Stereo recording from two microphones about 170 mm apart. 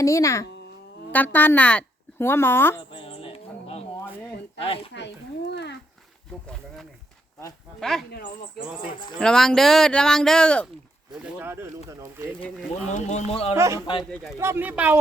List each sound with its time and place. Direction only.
0.0 s a child's voice: 20° left (ahead or behind)
2.9 s a sound: 30° left (ahead or behind)
4.6 s speech: 35° left (ahead or behind)
4.9 s speech: 85° left
7.8 s speech: centre (ahead or behind)
9.1 s speech: 5° left (ahead or behind)
11.1 s speech: 5° right (ahead or behind)
12.9 s speech: 45° left (ahead or behind)
13.6 s speech: 15° right (ahead or behind)
14.0 s speech: centre (ahead or behind)
14.3 s speech: 15° right (ahead or behind)